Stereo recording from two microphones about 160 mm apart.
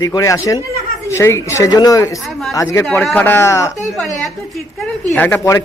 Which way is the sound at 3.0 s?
5° left (ahead or behind).